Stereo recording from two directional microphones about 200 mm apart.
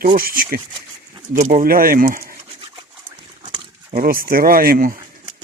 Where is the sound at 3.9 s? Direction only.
45° right (ahead or behind).